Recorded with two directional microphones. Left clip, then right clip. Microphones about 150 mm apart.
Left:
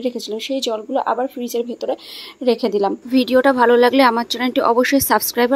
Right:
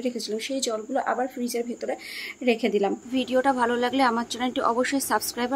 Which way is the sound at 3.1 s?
45° left (ahead or behind).